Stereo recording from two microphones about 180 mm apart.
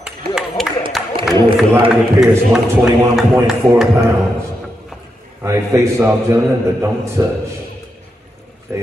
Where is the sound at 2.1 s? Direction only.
5° right (ahead or behind).